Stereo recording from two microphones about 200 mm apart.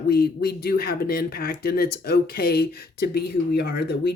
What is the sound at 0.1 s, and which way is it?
Speech, 50° left (ahead or behind).